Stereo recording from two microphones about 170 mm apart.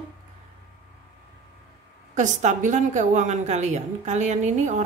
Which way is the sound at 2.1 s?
45° right (ahead or behind).